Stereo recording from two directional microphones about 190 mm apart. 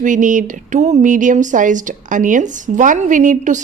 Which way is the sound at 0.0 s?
40° right (ahead or behind).